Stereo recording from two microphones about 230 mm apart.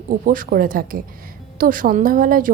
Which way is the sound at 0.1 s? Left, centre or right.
Right.